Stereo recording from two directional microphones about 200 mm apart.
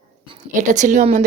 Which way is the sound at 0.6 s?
40° right (ahead or behind).